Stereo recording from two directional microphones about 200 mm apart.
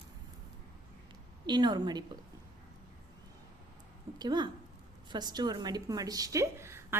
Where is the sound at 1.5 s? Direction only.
20° right (ahead or behind).